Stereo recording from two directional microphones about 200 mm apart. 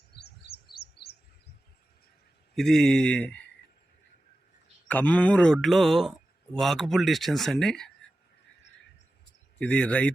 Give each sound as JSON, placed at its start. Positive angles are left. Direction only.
{"t": 0.1, "sound": "chirp", "side_deg": 55}
{"t": 2.6, "sound": "speech", "side_deg": 5}
{"t": 4.9, "sound": "speech", "side_deg": 10}
{"t": 9.6, "sound": "speech", "side_deg": 5}